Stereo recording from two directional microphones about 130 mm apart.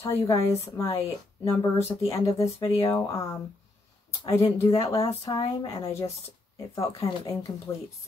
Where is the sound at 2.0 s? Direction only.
25° left (ahead or behind).